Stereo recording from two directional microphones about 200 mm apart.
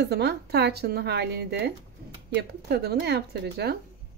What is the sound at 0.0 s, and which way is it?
A woman's voice, 55° right (ahead or behind).